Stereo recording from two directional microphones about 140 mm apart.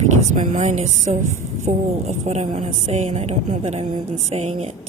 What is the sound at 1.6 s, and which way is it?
Speech, 50° right (ahead or behind).